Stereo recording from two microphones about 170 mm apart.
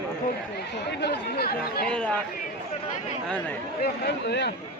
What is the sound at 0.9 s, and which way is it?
Speech, 75° left (ahead or behind).